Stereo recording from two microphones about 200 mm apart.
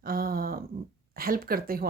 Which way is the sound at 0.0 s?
50° right (ahead or behind).